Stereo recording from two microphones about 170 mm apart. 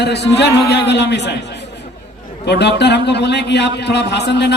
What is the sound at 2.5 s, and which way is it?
A man's voice, 80° left.